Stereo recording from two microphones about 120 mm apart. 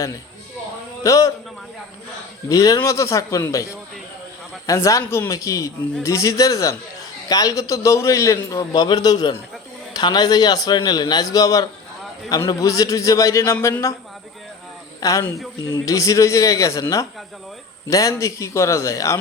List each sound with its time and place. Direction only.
1.0 s a man's voice: 25° left (ahead or behind)
2.5 s a man's voice: 30° left (ahead or behind)
15.0 s a man's voice: 30° left (ahead or behind)
17.8 s a man's voice: 25° left (ahead or behind)